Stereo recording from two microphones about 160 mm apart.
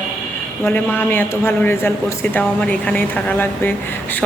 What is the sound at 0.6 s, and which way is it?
Speech, 15° left (ahead or behind).